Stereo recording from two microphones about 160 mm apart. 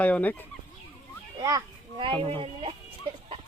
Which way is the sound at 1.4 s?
20° right (ahead or behind).